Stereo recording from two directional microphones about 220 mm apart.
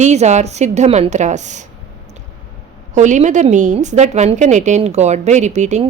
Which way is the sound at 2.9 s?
35° right (ahead or behind).